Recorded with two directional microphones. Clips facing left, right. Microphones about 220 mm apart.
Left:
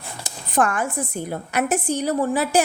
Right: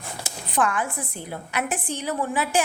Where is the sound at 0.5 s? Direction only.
45° left (ahead or behind).